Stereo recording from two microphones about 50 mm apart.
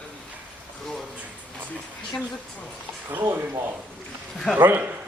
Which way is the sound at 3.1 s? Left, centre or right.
Right.